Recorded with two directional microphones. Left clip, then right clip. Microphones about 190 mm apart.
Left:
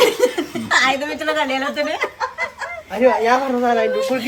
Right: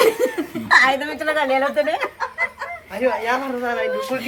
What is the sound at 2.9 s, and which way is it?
Speech, 45° left (ahead or behind).